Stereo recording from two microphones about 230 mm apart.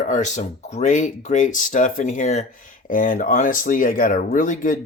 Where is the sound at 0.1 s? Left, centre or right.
Left.